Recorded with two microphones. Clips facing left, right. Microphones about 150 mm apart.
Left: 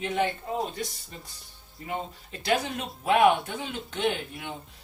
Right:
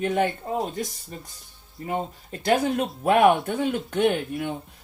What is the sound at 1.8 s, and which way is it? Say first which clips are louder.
Speech: right 5 dB; 40° right (ahead or behind).